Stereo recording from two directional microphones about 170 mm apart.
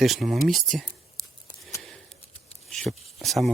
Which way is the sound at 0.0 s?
Centre (ahead or behind).